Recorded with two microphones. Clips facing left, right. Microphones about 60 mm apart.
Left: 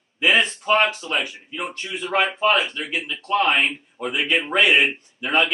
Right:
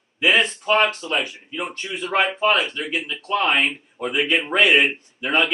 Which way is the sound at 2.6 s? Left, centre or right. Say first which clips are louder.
Right 1 dB; centre.